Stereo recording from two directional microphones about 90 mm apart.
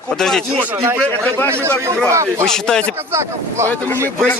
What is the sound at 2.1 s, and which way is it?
Speech, 35° right (ahead or behind).